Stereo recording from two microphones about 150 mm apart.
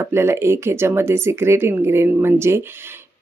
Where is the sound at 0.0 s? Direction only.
15° right (ahead or behind).